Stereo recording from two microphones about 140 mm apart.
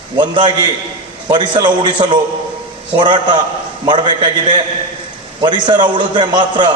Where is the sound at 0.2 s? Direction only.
35° right (ahead or behind).